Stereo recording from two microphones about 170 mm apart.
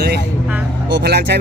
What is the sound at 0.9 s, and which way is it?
Speech, 70° right (ahead or behind).